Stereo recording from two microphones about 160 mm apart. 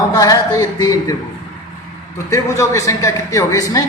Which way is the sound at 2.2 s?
20° left (ahead or behind).